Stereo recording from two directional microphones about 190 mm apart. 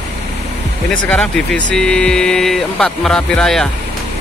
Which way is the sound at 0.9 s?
5° left (ahead or behind).